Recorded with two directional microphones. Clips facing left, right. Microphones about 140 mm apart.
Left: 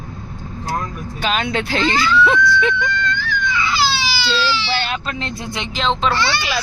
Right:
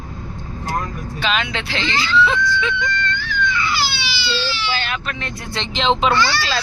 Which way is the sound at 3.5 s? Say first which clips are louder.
Left 3 dB; 90° left.